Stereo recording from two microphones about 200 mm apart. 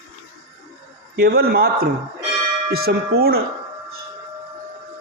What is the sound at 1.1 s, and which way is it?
A man's voice, 50° right (ahead or behind).